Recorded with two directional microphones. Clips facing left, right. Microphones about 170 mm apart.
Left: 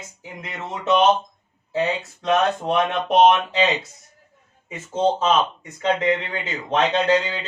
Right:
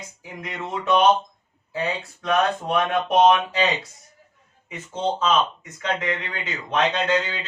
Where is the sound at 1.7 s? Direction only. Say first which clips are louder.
Left 4 dB; 20° left (ahead or behind).